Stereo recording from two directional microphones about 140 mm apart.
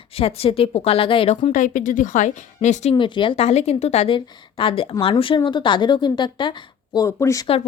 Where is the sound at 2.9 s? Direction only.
35° left (ahead or behind).